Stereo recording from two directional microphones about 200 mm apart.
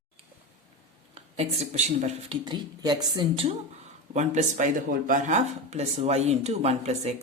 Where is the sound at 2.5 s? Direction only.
20° right (ahead or behind).